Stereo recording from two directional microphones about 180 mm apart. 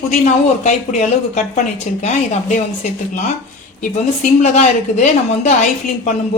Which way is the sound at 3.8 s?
40° left (ahead or behind).